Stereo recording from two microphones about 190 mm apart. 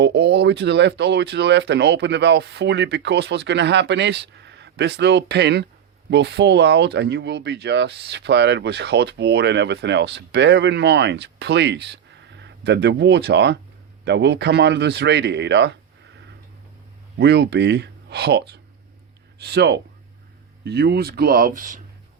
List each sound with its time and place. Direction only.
0.0 s speech: 60° right (ahead or behind)
17.2 s speech: 60° right (ahead or behind); by 21.8 s 45° right (ahead or behind)